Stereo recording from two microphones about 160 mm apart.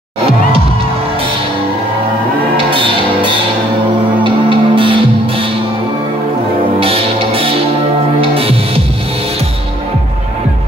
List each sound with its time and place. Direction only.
2.7 s music: 30° right (ahead or behind)
6.8 s music: 35° right (ahead or behind)